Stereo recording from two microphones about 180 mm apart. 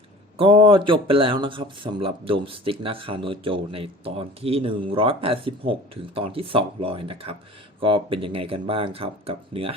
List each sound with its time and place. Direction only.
0.3 s speech: 30° right (ahead or behind)